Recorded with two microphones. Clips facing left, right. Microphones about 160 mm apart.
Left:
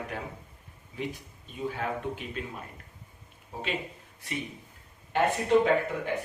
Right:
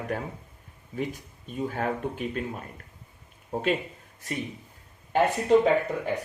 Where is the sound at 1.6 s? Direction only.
45° right (ahead or behind).